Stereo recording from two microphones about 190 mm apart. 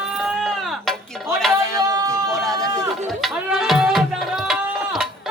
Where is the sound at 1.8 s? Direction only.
15° right (ahead or behind).